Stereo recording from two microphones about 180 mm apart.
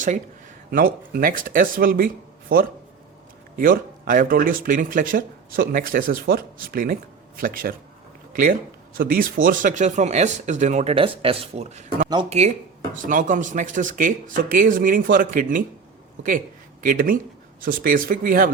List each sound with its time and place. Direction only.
0.7 s speech: 55° right (ahead or behind)
16.8 s speech: 50° right (ahead or behind)